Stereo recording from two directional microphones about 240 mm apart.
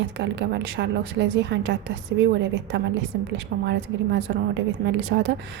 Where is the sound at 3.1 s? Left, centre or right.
Right.